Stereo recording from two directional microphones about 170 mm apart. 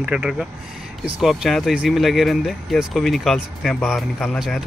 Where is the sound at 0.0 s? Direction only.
5° right (ahead or behind).